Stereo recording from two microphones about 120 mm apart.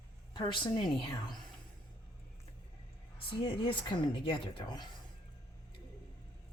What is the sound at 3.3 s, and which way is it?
Speech, 50° left (ahead or behind).